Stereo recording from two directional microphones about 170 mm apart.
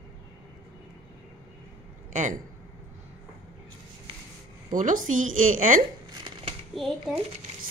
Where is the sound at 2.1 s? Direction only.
45° right (ahead or behind).